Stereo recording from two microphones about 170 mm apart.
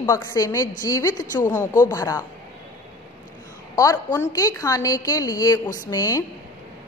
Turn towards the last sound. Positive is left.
turn(degrees=20)  # may be behind; listen again after turning